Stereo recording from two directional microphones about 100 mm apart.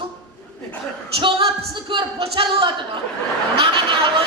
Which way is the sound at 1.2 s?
55° right (ahead or behind).